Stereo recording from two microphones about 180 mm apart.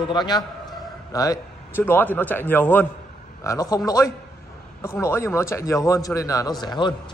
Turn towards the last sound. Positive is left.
turn(degrees=25)  # may be behind; listen again after turning